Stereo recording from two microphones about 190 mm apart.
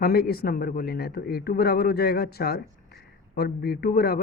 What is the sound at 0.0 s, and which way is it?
A man's voice, 55° left (ahead or behind).